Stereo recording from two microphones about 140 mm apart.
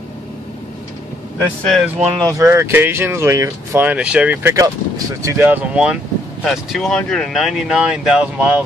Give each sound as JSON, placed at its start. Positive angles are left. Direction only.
{"t": 1.4, "sound": "speech", "side_deg": 10}
{"t": 2.2, "sound": "speech", "side_deg": -20}